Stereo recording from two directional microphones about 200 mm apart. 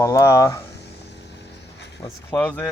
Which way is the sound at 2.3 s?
5° left (ahead or behind).